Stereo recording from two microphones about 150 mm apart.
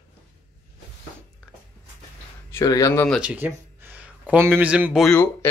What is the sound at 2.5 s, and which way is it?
Speech, 20° left (ahead or behind).